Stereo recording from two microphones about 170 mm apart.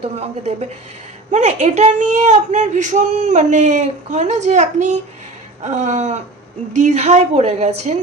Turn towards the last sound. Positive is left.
turn(degrees=-40)  # may be behind; listen again after turning